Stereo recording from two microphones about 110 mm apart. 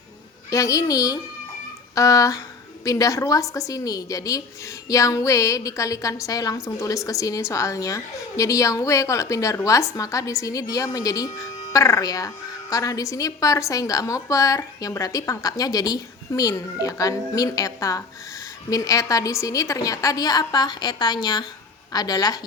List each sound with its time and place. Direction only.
0.5 s a woman's voice: 30° left (ahead or behind)